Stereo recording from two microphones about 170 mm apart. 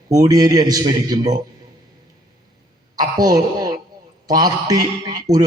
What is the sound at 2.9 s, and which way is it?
A woman's voice, 25° right (ahead or behind).